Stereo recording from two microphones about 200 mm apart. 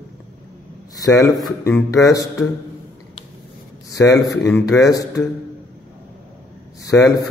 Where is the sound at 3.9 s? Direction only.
15° left (ahead or behind).